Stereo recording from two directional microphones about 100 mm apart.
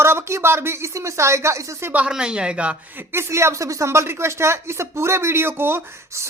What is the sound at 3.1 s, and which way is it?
Speech, 30° right (ahead or behind).